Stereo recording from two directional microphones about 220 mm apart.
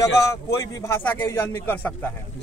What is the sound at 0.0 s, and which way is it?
A man's voice, 15° left (ahead or behind).